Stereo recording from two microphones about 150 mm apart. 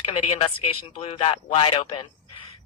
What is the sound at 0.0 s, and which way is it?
A man's voice, 40° left (ahead or behind).